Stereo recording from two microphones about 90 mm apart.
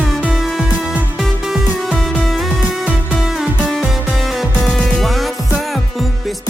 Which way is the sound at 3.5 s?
10° left (ahead or behind).